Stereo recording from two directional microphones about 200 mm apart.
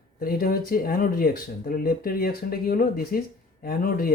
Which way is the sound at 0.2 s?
45° left (ahead or behind).